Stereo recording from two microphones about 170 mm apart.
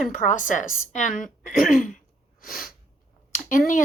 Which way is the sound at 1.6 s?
50° left (ahead or behind).